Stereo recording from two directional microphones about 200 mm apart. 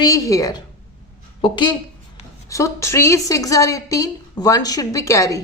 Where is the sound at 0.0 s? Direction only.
15° left (ahead or behind).